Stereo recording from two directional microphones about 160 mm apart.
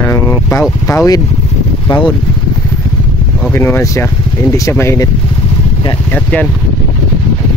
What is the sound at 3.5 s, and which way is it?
Speech, 15° left (ahead or behind).